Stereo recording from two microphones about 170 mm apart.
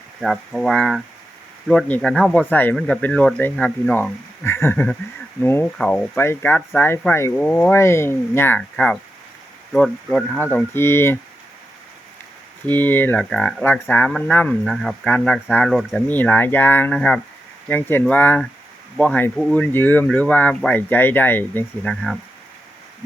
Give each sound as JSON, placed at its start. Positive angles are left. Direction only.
{"t": 0.2, "sound": "speech", "side_deg": 0}
{"t": 12.6, "sound": "speech", "side_deg": 10}